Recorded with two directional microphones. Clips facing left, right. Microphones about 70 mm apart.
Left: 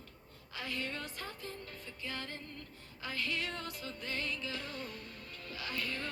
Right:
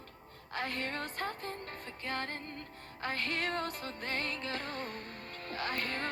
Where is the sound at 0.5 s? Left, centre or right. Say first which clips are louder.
Right 4 dB; right.